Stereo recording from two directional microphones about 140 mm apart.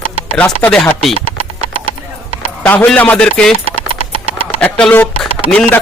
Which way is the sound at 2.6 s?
10° left (ahead or behind).